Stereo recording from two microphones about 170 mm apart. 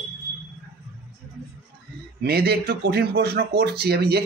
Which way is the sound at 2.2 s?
70° right (ahead or behind).